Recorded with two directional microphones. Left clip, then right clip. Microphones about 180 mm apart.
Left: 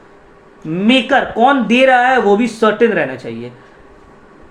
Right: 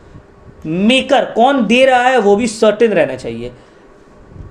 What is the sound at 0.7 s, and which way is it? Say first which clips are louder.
Speech: right 1 dB; 40° right (ahead or behind).